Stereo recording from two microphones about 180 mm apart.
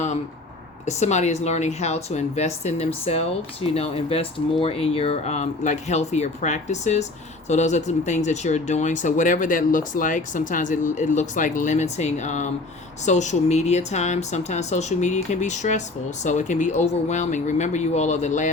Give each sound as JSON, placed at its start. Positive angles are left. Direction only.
{"t": 0.9, "sound": "a woman's voice", "side_deg": 40}